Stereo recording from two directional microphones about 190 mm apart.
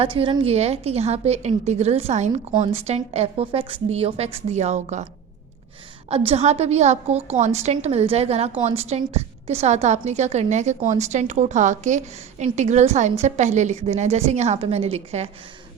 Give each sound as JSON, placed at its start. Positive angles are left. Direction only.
{"t": 0.0, "sound": "a woman's voice", "side_deg": -30}
{"t": 6.1, "sound": "a woman's voice", "side_deg": -30}